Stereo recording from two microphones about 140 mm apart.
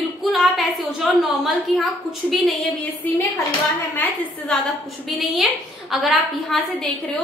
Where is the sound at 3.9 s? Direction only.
15° left (ahead or behind).